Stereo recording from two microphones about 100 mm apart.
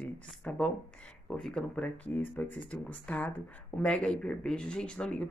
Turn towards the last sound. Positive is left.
turn(degrees=10)  # may be behind; listen again after turning